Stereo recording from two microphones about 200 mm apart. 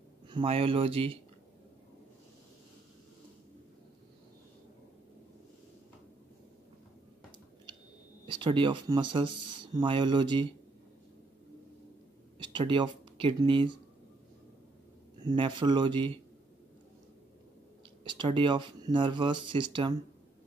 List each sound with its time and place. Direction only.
0.3 s speech: 25° right (ahead or behind)
8.3 s speech: 25° right (ahead or behind)
12.4 s speech: 25° right (ahead or behind)
15.2 s speech: 25° right (ahead or behind)
18.0 s speech: 25° right (ahead or behind)